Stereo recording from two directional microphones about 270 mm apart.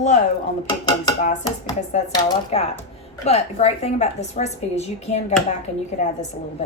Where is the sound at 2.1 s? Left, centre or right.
Centre.